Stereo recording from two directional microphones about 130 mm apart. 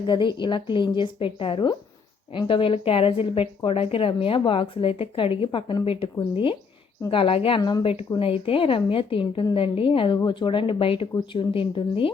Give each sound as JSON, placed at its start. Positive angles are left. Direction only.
{"t": 0.1, "sound": "a woman's voice", "side_deg": 35}